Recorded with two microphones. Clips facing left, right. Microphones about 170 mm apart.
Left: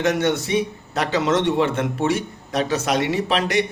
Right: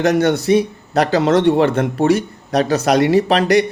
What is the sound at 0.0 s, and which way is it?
A man's voice, 35° right (ahead or behind).